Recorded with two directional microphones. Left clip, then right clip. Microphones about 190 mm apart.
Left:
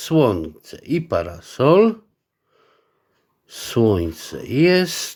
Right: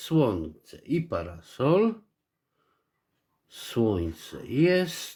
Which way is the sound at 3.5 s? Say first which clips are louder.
Left 9 dB; 35° left (ahead or behind).